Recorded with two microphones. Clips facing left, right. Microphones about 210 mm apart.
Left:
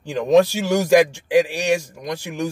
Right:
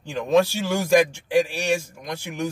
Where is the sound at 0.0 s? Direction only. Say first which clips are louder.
Left 4 dB; 15° left (ahead or behind).